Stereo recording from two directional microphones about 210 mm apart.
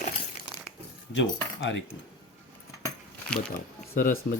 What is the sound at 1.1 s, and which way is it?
Speech, 60° left (ahead or behind).